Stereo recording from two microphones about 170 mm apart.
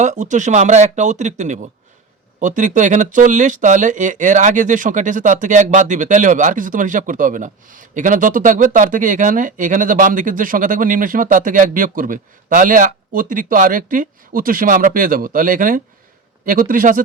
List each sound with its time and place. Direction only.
0.0 s a man's voice: 45° right (ahead or behind)